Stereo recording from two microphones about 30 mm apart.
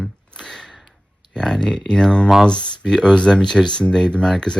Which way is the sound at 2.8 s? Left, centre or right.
Centre.